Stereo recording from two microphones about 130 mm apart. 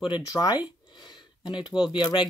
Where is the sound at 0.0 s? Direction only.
30° left (ahead or behind).